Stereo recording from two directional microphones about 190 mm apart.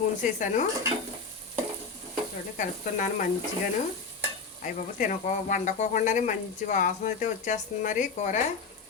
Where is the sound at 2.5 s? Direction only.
45° left (ahead or behind).